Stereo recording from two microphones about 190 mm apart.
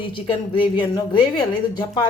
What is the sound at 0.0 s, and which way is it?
Speech, 25° left (ahead or behind).